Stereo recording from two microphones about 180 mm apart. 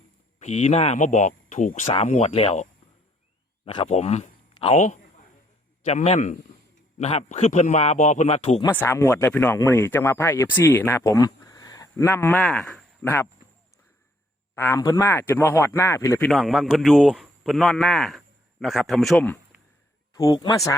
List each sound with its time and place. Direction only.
0.3 s a man's voice: 40° left (ahead or behind)
3.7 s a man's voice: 35° left (ahead or behind)
8.7 s speech: 10° left (ahead or behind)
14.5 s speech: 15° left (ahead or behind)
16.2 s a man's voice: centre (ahead or behind)
20.1 s speech: 20° left (ahead or behind)